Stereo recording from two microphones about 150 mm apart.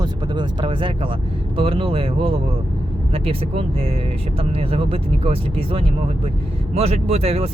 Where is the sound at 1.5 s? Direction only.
40° right (ahead or behind).